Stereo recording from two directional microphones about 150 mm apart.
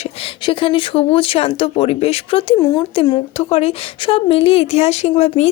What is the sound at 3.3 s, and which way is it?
A woman's voice, 45° left (ahead or behind).